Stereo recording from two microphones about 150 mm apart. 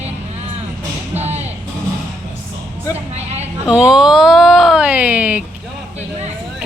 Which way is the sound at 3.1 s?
45° right (ahead or behind).